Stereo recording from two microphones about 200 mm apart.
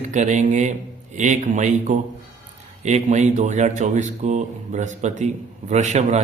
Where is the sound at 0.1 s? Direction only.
35° right (ahead or behind).